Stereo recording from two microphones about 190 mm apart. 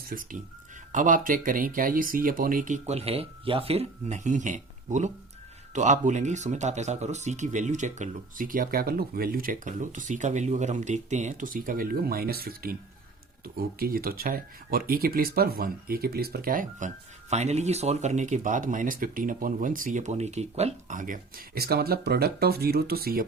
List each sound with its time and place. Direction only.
0.1 s speech: 45° right (ahead or behind)